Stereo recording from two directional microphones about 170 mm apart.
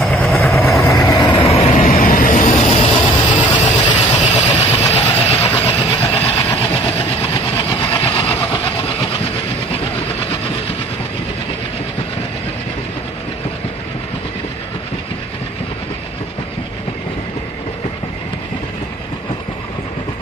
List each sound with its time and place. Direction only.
0.0 s vehicle: centre (ahead or behind)
0.3 s vehicle: 15° left (ahead or behind)
1.6 s vehicle: 40° left (ahead or behind)
6.3 s train: 30° left (ahead or behind)